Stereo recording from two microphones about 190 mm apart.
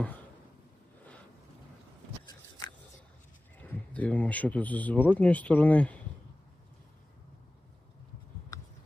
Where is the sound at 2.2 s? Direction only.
20° left (ahead or behind).